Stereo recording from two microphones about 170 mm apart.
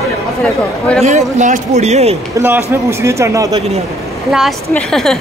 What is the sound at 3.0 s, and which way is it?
Speech, 15° right (ahead or behind).